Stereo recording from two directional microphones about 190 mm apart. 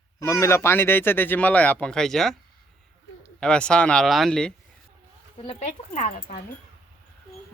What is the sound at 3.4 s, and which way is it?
Speech, 5° left (ahead or behind).